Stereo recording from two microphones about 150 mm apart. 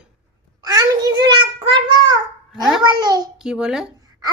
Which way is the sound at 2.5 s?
Centre (ahead or behind).